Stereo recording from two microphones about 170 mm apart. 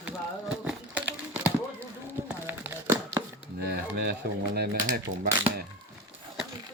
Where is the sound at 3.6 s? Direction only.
70° right (ahead or behind).